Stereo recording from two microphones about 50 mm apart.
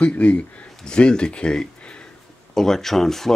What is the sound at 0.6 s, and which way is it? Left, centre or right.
Speech, centre.